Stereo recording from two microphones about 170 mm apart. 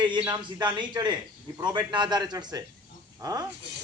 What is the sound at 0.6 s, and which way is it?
A man's voice, 25° right (ahead or behind).